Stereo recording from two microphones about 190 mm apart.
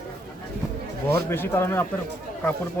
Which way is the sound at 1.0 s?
10° left (ahead or behind).